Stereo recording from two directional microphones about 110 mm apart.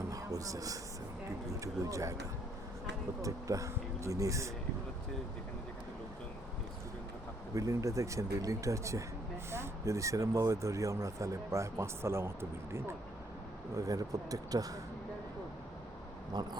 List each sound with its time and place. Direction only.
0.1 s music: 30° right (ahead or behind)
1.6 s speech: 30° right (ahead or behind)
3.2 s speech: 30° right (ahead or behind)
7.5 s speech: 30° right (ahead or behind)